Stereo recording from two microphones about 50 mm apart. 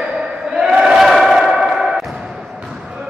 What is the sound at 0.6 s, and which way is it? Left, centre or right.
Crowd, centre.